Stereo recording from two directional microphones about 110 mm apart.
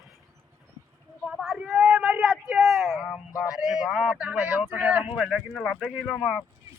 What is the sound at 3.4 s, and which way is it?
Speech, 5° right (ahead or behind).